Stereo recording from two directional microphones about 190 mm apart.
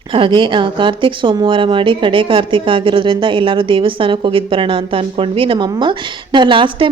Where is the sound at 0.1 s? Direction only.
25° right (ahead or behind).